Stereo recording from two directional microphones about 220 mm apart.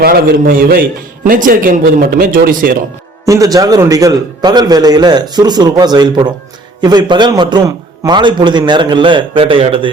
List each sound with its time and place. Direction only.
0.0 s a man's voice: 45° right (ahead or behind)
3.2 s a man's voice: 15° right (ahead or behind)